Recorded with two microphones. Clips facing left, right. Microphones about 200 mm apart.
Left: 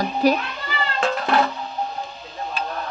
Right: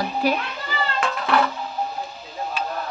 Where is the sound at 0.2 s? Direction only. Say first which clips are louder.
Left 5 dB; 40° left (ahead or behind).